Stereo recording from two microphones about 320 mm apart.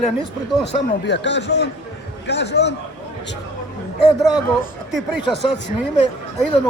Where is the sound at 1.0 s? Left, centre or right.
Left.